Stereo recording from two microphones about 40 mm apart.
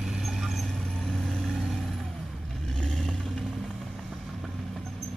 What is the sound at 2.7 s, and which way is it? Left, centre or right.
Vehicle, centre.